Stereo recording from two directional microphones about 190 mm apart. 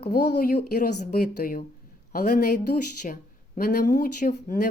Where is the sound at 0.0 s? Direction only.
55° left (ahead or behind).